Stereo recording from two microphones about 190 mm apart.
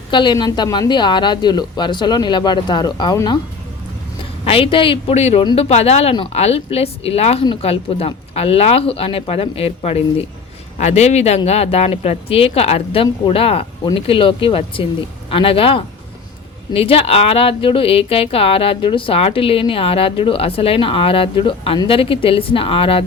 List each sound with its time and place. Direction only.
0.1 s speech: 25° left (ahead or behind)
4.4 s speech: 30° left (ahead or behind)